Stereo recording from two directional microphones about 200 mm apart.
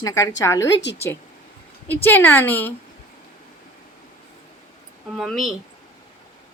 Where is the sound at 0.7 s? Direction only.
60° left (ahead or behind).